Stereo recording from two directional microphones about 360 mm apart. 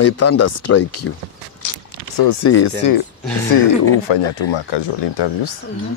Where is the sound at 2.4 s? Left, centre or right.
Left.